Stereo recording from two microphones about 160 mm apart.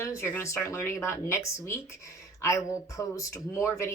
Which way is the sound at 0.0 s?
15° left (ahead or behind).